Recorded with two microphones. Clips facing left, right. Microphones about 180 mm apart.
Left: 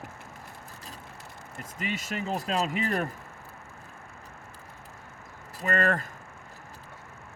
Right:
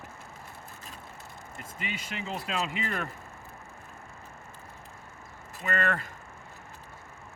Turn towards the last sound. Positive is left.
turn(degrees=40)  # may be behind; listen again after turning